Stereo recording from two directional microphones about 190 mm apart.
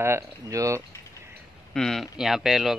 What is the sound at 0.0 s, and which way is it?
Speech, 15° right (ahead or behind).